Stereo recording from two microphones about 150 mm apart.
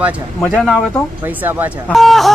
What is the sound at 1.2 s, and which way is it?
Speech, 10° right (ahead or behind).